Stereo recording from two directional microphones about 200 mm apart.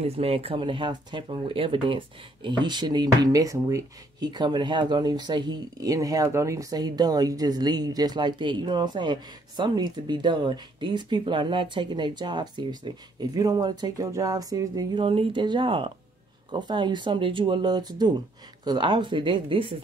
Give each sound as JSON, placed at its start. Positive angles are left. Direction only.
{"t": 0.0, "sound": "speech", "side_deg": -30}